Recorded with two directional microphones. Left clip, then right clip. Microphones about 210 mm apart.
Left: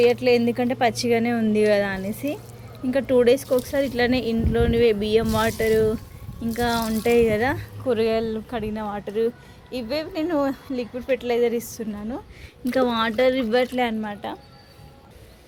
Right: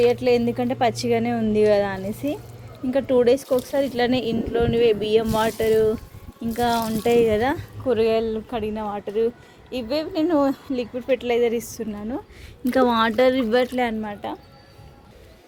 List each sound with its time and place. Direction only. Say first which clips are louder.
0.0 s a woman's voice: even; 5° right (ahead or behind)
12.7 s speech: right 3 dB; 25° right (ahead or behind); by 14.1 s 10° right (ahead or behind)
14.1 s a woman's voice: right 1 dB; centre (ahead or behind)